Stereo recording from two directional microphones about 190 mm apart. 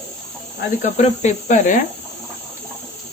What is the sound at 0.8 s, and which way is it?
Speech, 40° left (ahead or behind).